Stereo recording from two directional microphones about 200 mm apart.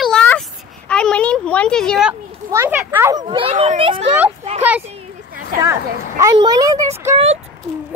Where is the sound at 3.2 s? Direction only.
30° right (ahead or behind).